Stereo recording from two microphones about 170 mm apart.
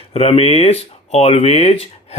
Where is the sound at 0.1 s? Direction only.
35° left (ahead or behind).